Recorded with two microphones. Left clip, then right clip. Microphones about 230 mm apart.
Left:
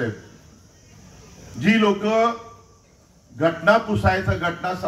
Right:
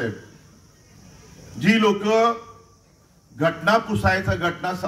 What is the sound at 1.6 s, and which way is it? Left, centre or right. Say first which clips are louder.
Speech: even; right.